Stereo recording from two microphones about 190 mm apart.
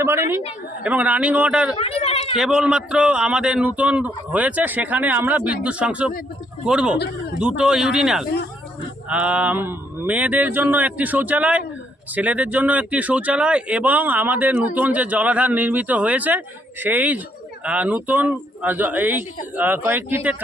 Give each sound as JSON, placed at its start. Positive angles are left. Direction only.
{"t": 0.0, "sound": "speech", "side_deg": -15}
{"t": 1.8, "sound": "a sound", "side_deg": 30}
{"t": 2.4, "sound": "a man's voice", "side_deg": -5}